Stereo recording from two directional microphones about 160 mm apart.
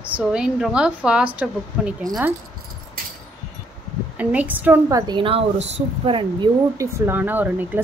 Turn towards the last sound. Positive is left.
turn(degrees=-10)  # may be behind; listen again after turning